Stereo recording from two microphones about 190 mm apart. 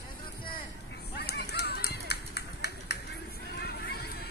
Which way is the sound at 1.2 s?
60° left (ahead or behind).